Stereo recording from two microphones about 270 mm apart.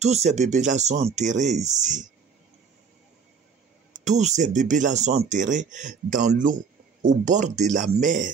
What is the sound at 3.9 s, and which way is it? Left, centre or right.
Speech, right.